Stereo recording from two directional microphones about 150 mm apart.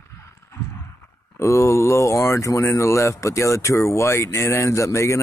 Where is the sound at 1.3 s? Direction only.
20° left (ahead or behind).